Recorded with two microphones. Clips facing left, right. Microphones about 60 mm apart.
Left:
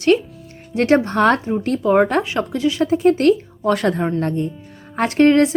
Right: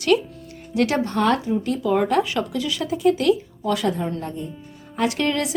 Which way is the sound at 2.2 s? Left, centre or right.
Left.